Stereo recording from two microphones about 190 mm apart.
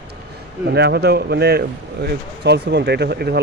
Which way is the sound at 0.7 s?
60° right (ahead or behind).